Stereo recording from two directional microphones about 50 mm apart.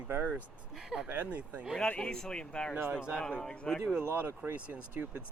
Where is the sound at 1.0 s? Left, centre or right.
Right.